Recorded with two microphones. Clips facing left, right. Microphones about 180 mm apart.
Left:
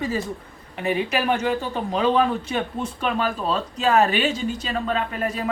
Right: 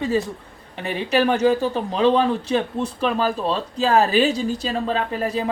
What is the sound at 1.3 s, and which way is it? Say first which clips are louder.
A woman's voice: right 5 dB; 35° right (ahead or behind).